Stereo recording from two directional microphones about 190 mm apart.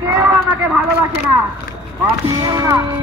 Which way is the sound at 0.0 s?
15° right (ahead or behind).